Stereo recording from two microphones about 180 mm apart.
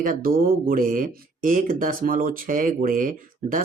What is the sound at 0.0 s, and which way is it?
Speech, 50° right (ahead or behind).